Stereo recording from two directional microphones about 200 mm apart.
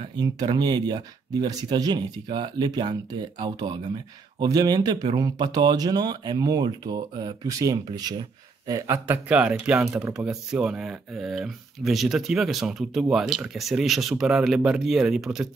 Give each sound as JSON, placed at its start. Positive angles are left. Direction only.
{"t": 0.1, "sound": "speech", "side_deg": -20}